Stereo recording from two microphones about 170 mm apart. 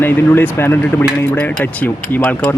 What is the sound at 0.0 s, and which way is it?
Speech, 10° left (ahead or behind).